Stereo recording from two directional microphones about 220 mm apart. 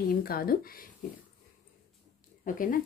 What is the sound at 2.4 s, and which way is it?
Speech, 40° left (ahead or behind).